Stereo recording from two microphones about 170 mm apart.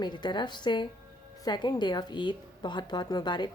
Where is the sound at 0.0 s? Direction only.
25° left (ahead or behind).